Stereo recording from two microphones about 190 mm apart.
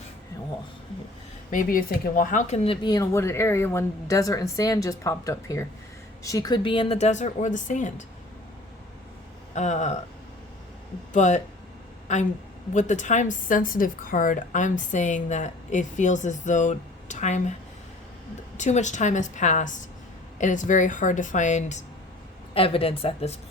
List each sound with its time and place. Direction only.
1.5 s speech: 45° left (ahead or behind)
2.8 s a woman's voice: 20° left (ahead or behind); by 8.0 s 40° left (ahead or behind)
9.6 s a woman's voice: 40° left (ahead or behind)
11.1 s a woman's voice: 40° left (ahead or behind)
18.5 s a woman's voice: 40° left (ahead or behind)